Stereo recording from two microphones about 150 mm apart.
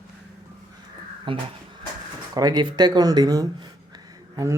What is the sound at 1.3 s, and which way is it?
Speech, 35° right (ahead or behind).